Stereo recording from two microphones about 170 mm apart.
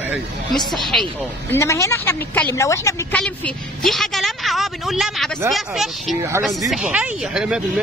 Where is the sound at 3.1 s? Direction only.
5° left (ahead or behind).